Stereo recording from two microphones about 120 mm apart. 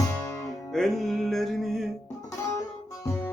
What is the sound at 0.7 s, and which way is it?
Music, 5° left (ahead or behind).